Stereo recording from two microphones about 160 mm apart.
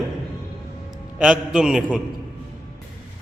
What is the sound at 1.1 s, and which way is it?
Speech, 5° right (ahead or behind).